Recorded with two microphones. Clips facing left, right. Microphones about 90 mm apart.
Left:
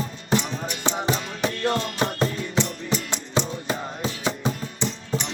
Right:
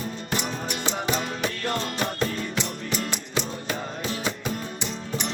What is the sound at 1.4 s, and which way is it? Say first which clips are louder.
Music: left 4 dB; 25° left (ahead or behind).